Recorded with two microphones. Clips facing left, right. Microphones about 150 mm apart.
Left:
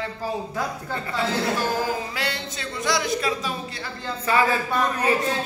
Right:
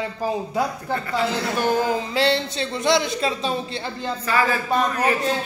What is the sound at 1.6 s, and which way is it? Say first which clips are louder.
Speech: right 4 dB; 20° right (ahead or behind).